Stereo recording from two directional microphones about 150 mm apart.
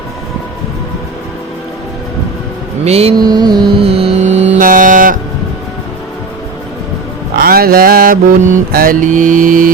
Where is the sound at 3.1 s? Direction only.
25° right (ahead or behind); by 4.4 s 50° right (ahead or behind).